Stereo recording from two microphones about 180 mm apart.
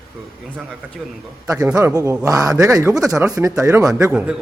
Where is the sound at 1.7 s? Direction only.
20° right (ahead or behind).